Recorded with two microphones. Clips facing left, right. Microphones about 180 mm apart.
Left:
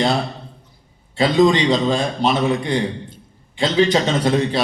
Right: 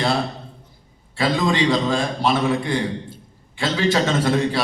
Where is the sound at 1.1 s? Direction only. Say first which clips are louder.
Left 6 dB; 20° left (ahead or behind).